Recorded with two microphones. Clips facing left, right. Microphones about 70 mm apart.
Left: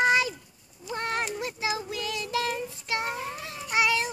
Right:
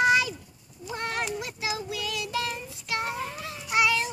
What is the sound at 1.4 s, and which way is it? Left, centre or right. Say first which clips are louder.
Child singing: left 2 dB; left.